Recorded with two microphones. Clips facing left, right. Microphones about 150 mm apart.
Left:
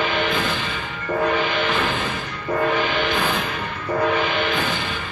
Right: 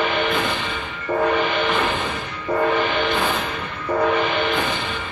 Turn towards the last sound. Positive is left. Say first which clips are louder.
# right 1 dB
turn(degrees=-20)  # may be behind; listen again after turning